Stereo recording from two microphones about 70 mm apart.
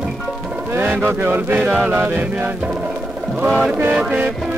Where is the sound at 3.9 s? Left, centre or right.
Centre.